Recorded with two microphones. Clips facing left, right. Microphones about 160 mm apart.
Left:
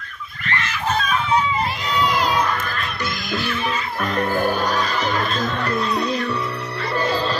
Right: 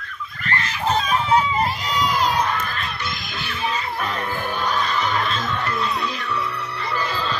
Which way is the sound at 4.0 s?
45° left (ahead or behind).